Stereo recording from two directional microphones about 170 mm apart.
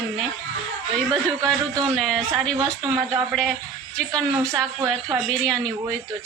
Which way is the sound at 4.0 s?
5° left (ahead or behind).